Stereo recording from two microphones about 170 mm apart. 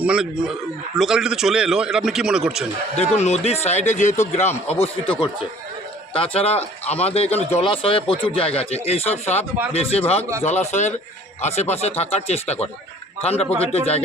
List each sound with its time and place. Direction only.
0.0 s a man's voice: 5° right (ahead or behind)
3.0 s a man's voice: 40° left (ahead or behind)
6.1 s a man's voice: 30° left (ahead or behind)